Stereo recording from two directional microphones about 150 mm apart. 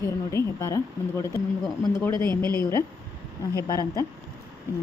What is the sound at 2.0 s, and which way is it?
Speech, 20° left (ahead or behind).